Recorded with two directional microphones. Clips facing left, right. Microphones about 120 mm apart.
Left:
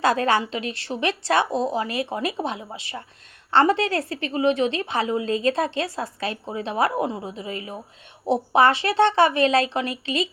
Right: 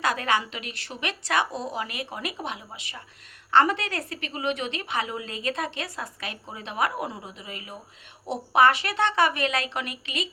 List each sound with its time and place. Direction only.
0.0 s a woman's voice: 30° left (ahead or behind)